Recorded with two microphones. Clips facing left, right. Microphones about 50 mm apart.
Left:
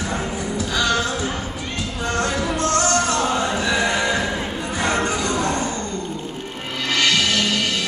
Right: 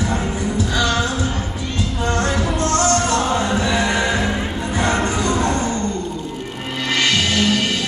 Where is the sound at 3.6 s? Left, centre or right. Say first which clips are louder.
Right 2 dB; right.